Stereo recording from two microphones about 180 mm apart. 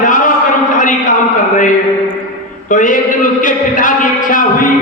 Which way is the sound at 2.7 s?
45° left (ahead or behind).